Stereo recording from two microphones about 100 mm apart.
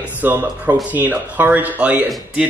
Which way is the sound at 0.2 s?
20° right (ahead or behind).